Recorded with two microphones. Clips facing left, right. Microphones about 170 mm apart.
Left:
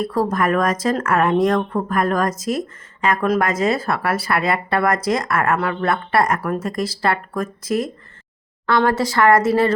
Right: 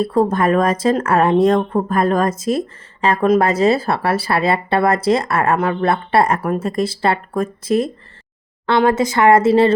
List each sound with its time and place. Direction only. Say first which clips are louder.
0.0 s speech: right 4 dB; 25° right (ahead or behind)